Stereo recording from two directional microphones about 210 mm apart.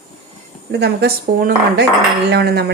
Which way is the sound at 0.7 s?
50° right (ahead or behind).